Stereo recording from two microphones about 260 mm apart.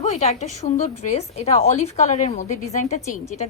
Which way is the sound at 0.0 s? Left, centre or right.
Left.